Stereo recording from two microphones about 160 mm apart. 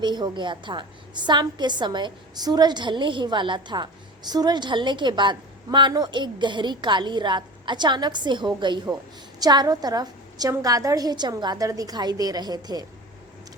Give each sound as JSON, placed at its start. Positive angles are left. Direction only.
{"t": 0.0, "sound": "a woman's voice", "side_deg": -30}